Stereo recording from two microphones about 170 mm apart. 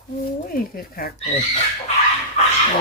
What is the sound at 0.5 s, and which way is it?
Speech, 60° left (ahead or behind).